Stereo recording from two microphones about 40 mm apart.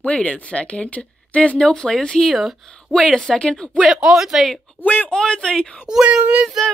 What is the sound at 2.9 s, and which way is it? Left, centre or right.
Speech, centre.